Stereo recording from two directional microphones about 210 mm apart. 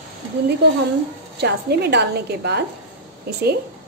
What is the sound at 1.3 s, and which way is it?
A woman's voice, 50° right (ahead or behind).